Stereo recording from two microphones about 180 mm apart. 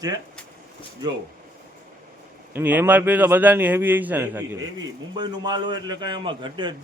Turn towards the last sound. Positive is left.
turn(degrees=-25)  # may be behind; listen again after turning